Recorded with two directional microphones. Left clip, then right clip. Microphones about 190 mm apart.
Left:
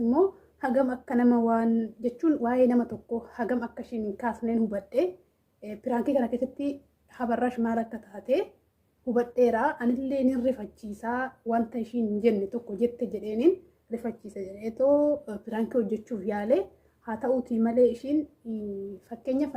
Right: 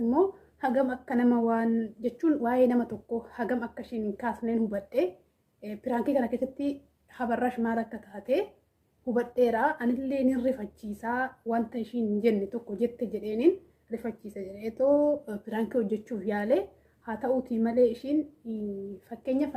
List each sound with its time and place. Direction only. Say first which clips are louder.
0.0 s a woman's voice: left 1 dB; 10° left (ahead or behind)